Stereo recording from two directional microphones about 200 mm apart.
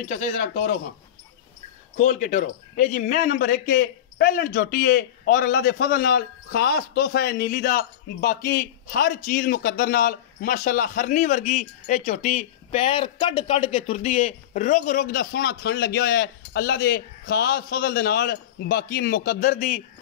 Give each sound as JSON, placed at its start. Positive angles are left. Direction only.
{"t": 0.1, "sound": "speech", "side_deg": 40}
{"t": 2.0, "sound": "a man's voice", "side_deg": 40}